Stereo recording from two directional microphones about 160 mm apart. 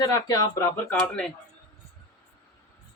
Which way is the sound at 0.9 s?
5° left (ahead or behind).